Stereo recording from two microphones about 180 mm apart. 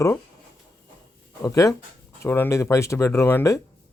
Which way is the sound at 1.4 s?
20° left (ahead or behind).